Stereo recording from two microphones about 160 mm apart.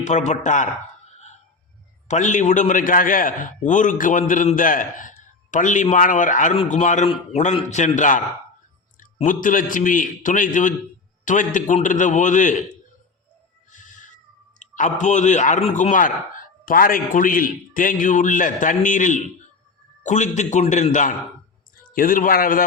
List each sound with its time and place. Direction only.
0.0 s a man's voice: 45° left (ahead or behind)
1.1 s a sound: 45° left (ahead or behind)
2.0 s a man's voice: 50° left (ahead or behind)
13.7 s cat: 55° left (ahead or behind)
14.6 s a man's voice: 50° left (ahead or behind)